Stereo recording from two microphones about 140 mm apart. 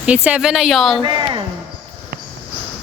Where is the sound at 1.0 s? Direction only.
35° right (ahead or behind).